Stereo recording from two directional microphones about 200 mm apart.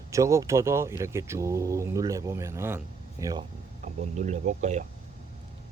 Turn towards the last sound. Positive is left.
turn(degrees=-35)  # may be behind; listen again after turning